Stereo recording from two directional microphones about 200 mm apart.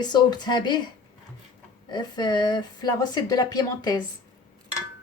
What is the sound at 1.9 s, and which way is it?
Speech, 20° left (ahead or behind).